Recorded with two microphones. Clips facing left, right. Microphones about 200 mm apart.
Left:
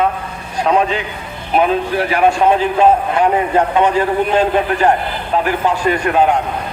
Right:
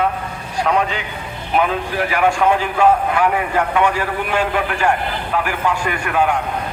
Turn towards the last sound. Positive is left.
turn(degrees=25)  # may be behind; listen again after turning